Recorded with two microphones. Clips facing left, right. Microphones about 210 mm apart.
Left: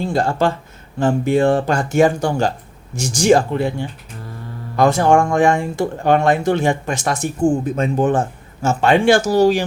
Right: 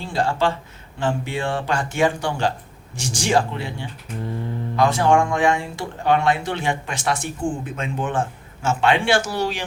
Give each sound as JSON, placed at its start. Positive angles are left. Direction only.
{"t": 0.0, "sound": "speech", "side_deg": 45}